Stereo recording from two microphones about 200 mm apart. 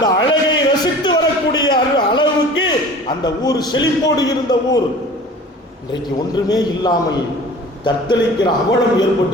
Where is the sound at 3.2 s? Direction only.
20° left (ahead or behind).